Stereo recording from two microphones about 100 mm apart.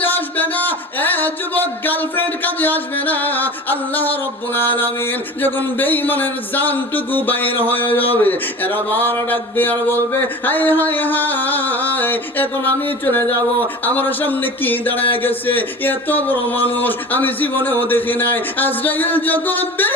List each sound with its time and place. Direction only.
0.0 s speech: 20° left (ahead or behind)